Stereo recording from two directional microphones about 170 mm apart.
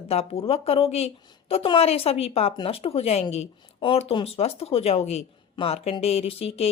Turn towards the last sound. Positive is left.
turn(degrees=35)  # may be behind; listen again after turning